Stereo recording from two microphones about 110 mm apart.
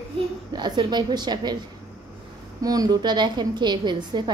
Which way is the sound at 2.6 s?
35° right (ahead or behind).